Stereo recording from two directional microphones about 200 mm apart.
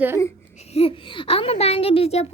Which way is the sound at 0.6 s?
30° left (ahead or behind).